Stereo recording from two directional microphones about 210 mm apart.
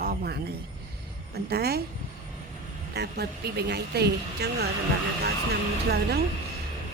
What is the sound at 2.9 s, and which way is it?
Speech, 50° right (ahead or behind).